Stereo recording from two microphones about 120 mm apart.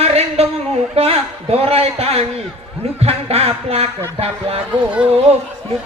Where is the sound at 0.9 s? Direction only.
60° right (ahead or behind).